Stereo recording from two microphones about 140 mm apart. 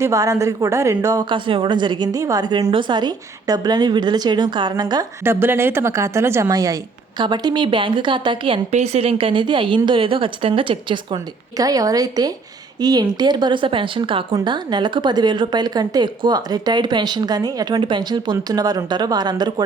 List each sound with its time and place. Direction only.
0.0 s a woman's voice: 20° right (ahead or behind)
5.2 s a woman's voice: 15° right (ahead or behind)